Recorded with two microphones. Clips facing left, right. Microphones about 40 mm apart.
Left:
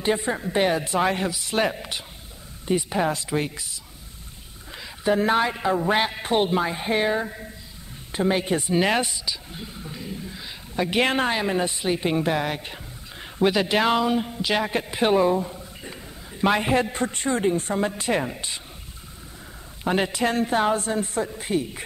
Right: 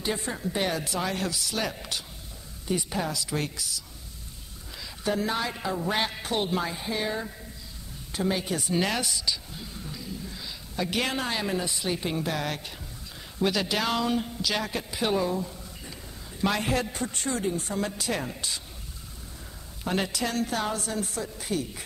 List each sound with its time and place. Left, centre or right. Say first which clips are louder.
0.0 s a woman's voice: left 6 dB; left
1.8 s a woman's voice: left 2 dB; left
3.1 s a woman's voice: left 6 dB; left
3.3 s a woman's voice: left 4 dB; left
4.7 s a sound: left 6 dB; left
5.2 s a woman's voice: left 8 dB; left
9.5 s a sound: left 3 dB; left
11.3 s a woman's voice: left 5 dB; left
19.8 s a woman's voice: left 6 dB; left